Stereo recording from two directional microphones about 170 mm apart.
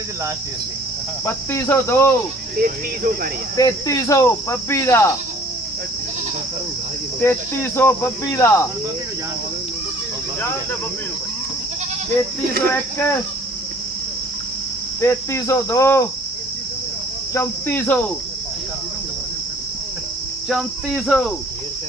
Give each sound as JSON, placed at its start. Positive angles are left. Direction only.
{"t": 1.2, "sound": "speech", "side_deg": 15}
{"t": 2.6, "sound": "speech", "side_deg": -55}
{"t": 3.6, "sound": "speech", "side_deg": 20}
{"t": 7.2, "sound": "speech", "side_deg": 15}
{"t": 15.0, "sound": "speech", "side_deg": 15}
{"t": 17.3, "sound": "speech", "side_deg": 15}
{"t": 20.5, "sound": "cricket", "side_deg": 0}